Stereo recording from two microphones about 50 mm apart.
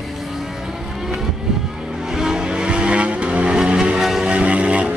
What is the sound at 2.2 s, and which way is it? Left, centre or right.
Vehicle, centre.